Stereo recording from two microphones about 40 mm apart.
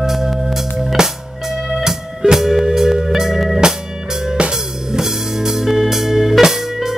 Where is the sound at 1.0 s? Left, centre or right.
Centre.